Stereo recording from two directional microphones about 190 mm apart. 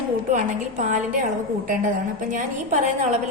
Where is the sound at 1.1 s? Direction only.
45° right (ahead or behind).